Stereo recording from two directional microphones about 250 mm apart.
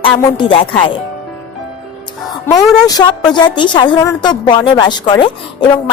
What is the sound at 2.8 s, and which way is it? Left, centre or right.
A woman's voice, centre.